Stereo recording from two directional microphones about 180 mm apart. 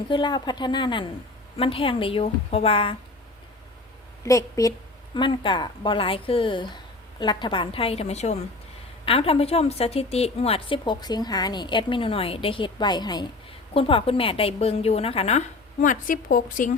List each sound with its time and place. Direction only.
0.1 s a woman's voice: 25° left (ahead or behind)
4.2 s a woman's voice: 15° left (ahead or behind); by 16.7 s 50° left (ahead or behind)